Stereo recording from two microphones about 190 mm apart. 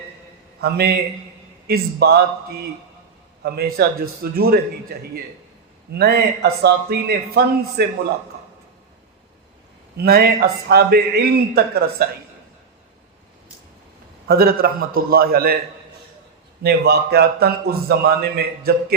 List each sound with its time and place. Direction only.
0.6 s a man's voice: 55° right (ahead or behind)
3.4 s a man's voice: 55° right (ahead or behind)
10.0 s a man's voice: 55° right (ahead or behind)
14.3 s a man's voice: 55° right (ahead or behind)
16.6 s a man's voice: 55° right (ahead or behind)